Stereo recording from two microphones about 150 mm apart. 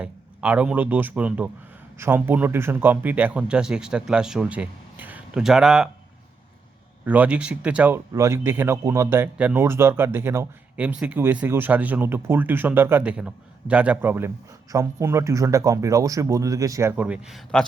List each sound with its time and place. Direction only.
0.0 s speech: 10° right (ahead or behind)
7.0 s speech: 10° right (ahead or behind)